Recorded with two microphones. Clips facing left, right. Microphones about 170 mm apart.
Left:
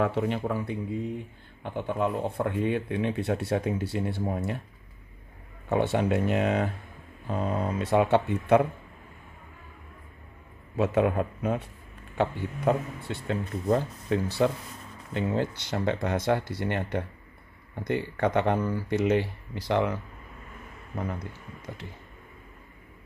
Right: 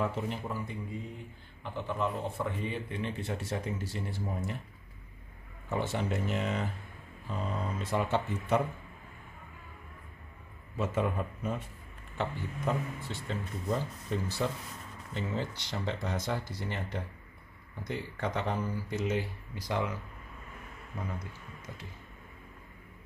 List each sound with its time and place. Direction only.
0.0 s speech: 70° left (ahead or behind)
1.6 s speech: 55° left (ahead or behind)
5.7 s speech: 65° left (ahead or behind)
10.8 s speech: 65° left (ahead or behind)
12.6 s speech: 60° left (ahead or behind)